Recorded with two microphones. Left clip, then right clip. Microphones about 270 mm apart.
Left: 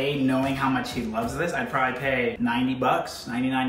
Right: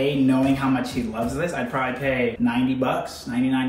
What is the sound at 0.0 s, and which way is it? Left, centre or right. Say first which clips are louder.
Speech: right 4 dB; centre.